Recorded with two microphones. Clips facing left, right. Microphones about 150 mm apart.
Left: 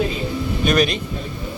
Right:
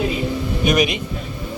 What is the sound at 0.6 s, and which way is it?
Speech, 10° right (ahead or behind).